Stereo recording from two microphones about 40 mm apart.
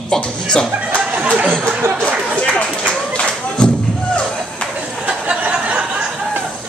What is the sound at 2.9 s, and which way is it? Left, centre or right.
Music, left.